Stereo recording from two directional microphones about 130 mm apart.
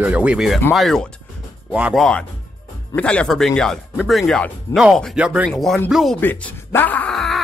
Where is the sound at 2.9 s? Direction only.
10° left (ahead or behind).